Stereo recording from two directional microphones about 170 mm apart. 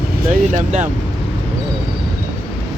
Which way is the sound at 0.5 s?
45° right (ahead or behind).